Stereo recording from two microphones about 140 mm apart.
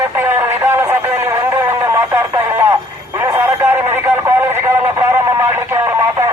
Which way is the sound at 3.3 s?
15° right (ahead or behind).